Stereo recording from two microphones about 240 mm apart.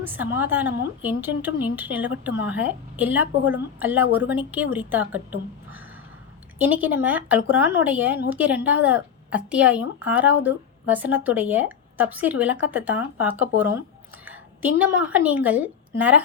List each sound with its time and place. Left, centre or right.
0.0 s a woman's voice: centre
6.8 s a woman's voice: centre